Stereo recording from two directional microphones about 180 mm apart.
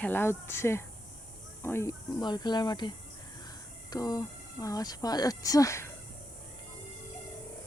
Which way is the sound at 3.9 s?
20° left (ahead or behind).